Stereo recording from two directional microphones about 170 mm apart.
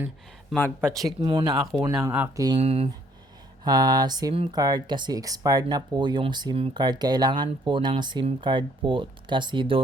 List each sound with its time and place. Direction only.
0.5 s speech: 10° left (ahead or behind)
0.9 s speech: 25° right (ahead or behind)
2.6 s speech: 35° right (ahead or behind)
3.6 s speech: 25° right (ahead or behind)